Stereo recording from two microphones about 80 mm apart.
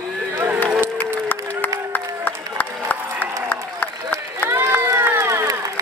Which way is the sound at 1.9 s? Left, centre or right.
Left.